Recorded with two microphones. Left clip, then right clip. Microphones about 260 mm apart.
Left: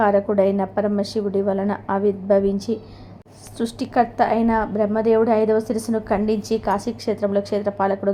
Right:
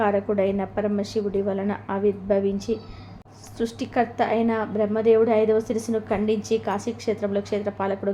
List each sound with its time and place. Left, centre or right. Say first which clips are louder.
0.0 s a woman's voice: left 5 dB; centre